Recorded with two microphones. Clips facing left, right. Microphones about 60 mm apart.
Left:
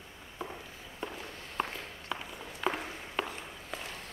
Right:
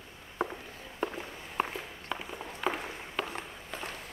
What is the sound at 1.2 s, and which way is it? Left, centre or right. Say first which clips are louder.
Walk: right 2 dB; centre.